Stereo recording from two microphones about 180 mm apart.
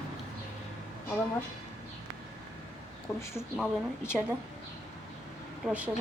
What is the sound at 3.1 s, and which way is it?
Speech, centre (ahead or behind).